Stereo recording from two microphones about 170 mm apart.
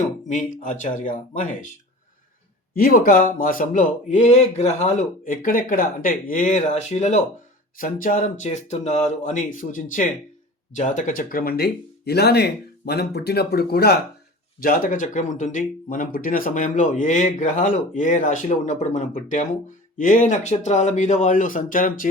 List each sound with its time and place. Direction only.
0.3 s speech: 45° left (ahead or behind)
2.7 s speech: 55° left (ahead or behind); by 7.2 s 40° left (ahead or behind)
7.8 s speech: 55° left (ahead or behind)
14.6 s speech: 55° left (ahead or behind)